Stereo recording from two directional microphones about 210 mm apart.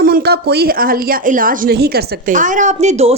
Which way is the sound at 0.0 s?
45° right (ahead or behind).